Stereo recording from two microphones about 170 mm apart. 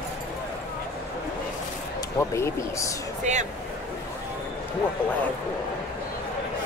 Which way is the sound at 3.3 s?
45° right (ahead or behind).